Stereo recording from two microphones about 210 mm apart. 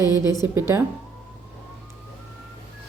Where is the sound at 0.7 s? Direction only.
15° right (ahead or behind).